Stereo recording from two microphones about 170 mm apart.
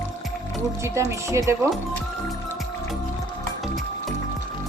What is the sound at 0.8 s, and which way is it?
Speech, 15° right (ahead or behind).